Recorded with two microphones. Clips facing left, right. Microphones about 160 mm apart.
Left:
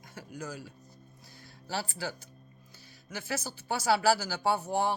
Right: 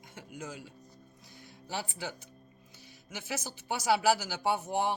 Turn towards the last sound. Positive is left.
turn(degrees=-20)  # may be behind; listen again after turning